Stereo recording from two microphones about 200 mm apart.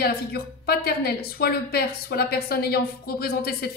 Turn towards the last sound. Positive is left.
turn(degrees=50)  # may be behind; listen again after turning